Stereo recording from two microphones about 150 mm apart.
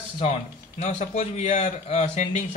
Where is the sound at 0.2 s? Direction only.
50° left (ahead or behind).